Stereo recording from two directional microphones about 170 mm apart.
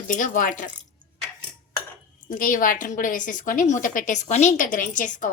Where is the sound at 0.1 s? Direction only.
50° left (ahead or behind).